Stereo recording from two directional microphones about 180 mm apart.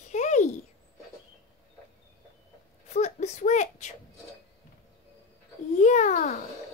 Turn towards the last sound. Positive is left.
turn(degrees=40)  # may be behind; listen again after turning